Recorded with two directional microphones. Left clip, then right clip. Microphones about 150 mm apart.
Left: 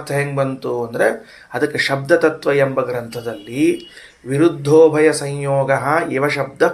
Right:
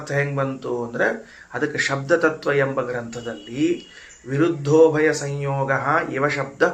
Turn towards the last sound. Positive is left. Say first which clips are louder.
# left 4 dB
turn(degrees=35)  # may be behind; listen again after turning